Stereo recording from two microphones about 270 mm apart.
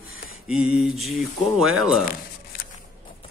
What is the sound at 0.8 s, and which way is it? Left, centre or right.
Speech, centre.